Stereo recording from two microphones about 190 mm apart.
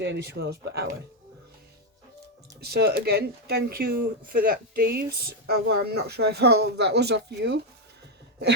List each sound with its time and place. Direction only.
0.0 s speech: 65° right (ahead or behind)
2.6 s speech: 55° right (ahead or behind)